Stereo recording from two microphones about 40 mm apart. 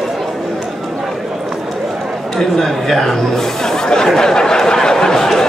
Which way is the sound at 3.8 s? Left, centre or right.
Centre.